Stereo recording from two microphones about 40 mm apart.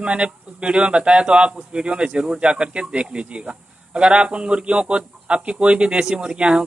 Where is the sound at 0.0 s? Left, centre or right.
Right.